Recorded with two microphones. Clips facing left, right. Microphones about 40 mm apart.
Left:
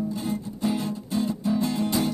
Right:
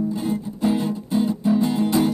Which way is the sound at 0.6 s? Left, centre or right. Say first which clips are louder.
Right 6 dB; centre.